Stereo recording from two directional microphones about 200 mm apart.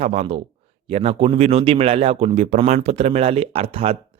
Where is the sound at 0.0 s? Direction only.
30° right (ahead or behind).